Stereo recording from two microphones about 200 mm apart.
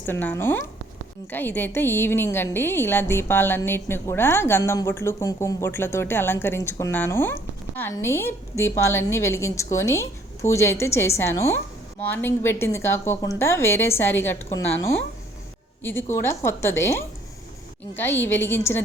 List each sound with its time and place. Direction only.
0.0 s a woman's voice: 10° left (ahead or behind)